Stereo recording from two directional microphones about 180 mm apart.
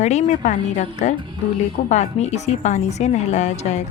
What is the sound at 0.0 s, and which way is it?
A woman's voice, 40° left (ahead or behind).